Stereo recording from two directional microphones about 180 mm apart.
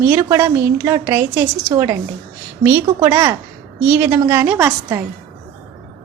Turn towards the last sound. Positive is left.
turn(degrees=-10)  # may be behind; listen again after turning